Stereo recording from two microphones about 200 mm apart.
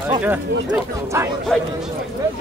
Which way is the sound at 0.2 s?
10° right (ahead or behind).